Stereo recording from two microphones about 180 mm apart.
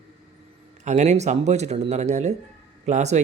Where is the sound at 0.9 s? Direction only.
40° right (ahead or behind).